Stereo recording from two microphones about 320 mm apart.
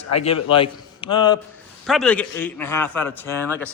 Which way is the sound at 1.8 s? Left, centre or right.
Centre.